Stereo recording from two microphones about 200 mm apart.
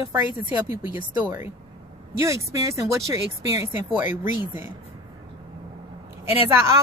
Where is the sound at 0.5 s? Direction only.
10° right (ahead or behind).